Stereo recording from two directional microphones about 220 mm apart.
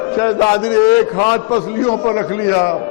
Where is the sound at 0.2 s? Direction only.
15° left (ahead or behind).